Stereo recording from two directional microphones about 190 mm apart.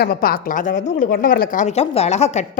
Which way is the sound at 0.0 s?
50° left (ahead or behind).